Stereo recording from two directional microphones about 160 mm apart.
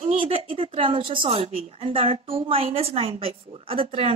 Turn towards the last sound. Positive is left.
turn(degrees=-35)  # may be behind; listen again after turning